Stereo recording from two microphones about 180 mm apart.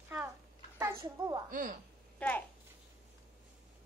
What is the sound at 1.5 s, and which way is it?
Speech, 50° right (ahead or behind).